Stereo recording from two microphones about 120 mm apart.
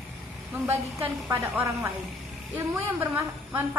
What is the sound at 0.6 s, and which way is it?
A woman's voice, 20° right (ahead or behind).